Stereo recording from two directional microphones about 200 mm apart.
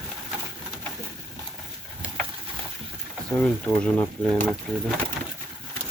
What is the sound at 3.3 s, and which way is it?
Speech, 5° left (ahead or behind).